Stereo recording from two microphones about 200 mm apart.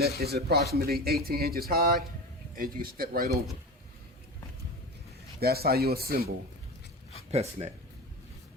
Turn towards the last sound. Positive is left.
turn(degrees=-30)  # may be behind; listen again after turning